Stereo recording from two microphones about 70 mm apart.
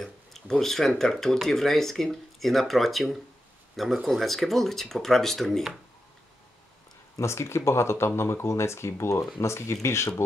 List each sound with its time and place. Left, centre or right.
0.0 s a sound: centre
1.1 s speech: centre
7.2 s speech: left